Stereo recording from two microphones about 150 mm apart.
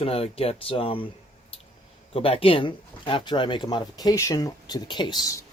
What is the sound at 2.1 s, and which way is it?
Speech, 40° left (ahead or behind).